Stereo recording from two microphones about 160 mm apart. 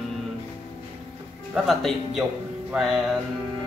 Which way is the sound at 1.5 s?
Centre (ahead or behind).